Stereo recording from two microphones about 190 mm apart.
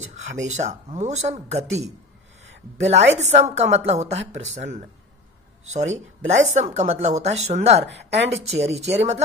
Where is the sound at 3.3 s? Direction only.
35° right (ahead or behind).